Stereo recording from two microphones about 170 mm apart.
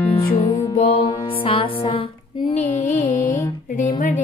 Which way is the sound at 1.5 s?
30° left (ahead or behind).